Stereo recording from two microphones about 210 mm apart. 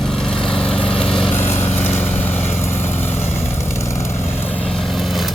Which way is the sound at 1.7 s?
10° left (ahead or behind).